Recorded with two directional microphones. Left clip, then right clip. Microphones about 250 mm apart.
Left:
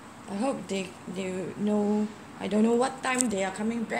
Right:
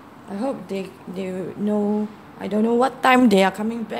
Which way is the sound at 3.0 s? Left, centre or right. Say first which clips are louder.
Right 13 dB; right.